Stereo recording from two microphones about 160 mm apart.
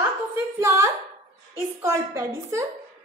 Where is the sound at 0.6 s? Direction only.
20° right (ahead or behind).